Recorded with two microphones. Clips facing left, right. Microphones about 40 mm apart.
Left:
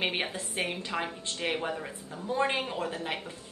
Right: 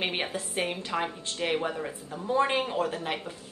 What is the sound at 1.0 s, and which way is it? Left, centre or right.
Speech, centre.